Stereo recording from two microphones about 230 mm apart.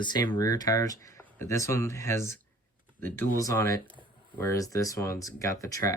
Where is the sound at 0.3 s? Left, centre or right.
Centre.